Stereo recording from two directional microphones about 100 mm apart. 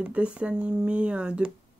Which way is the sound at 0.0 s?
10° right (ahead or behind).